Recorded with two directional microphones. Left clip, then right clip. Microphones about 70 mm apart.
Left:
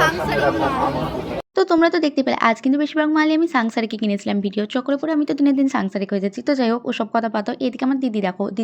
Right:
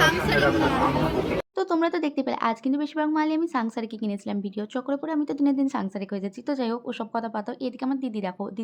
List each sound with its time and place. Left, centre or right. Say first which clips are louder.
0.0 s speech: left 3 dB; right
1.5 s speech: left 10 dB; left
3.6 s speech: left 8 dB; left
4.7 s speech: left 6 dB; left